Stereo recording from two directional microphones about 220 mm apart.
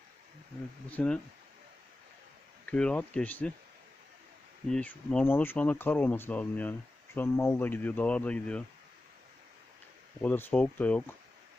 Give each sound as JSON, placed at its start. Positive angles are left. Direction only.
{"t": 0.9, "sound": "speech", "side_deg": 5}
{"t": 2.6, "sound": "speech", "side_deg": 5}
{"t": 4.7, "sound": "speech", "side_deg": 5}
{"t": 10.2, "sound": "speech", "side_deg": 10}